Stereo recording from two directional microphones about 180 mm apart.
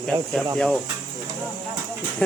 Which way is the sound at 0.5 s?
Centre (ahead or behind).